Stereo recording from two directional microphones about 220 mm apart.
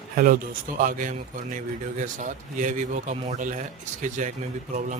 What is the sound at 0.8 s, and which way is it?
Speech, 35° right (ahead or behind).